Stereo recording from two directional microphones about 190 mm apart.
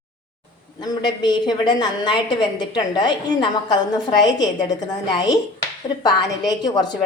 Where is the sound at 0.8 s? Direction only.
20° left (ahead or behind).